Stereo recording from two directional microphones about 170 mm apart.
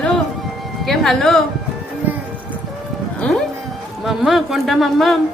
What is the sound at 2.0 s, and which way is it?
Music, 10° right (ahead or behind).